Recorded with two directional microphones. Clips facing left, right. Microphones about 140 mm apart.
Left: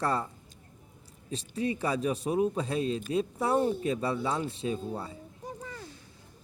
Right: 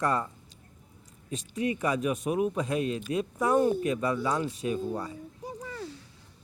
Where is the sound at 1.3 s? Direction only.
30° left (ahead or behind).